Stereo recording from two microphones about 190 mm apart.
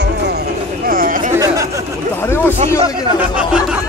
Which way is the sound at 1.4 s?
15° right (ahead or behind).